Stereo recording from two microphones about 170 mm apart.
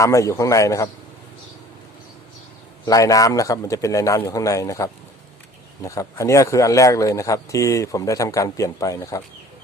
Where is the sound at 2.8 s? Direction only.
20° left (ahead or behind).